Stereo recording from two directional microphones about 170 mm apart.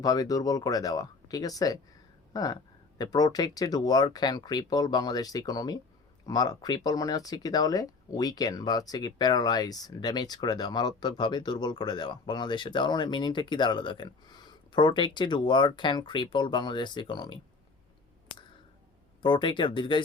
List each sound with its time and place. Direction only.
0.0 s speech: 20° left (ahead or behind)
19.2 s speech: 30° left (ahead or behind)